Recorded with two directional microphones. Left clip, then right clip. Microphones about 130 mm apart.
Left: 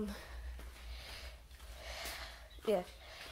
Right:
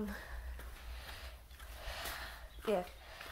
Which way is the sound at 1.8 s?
10° left (ahead or behind).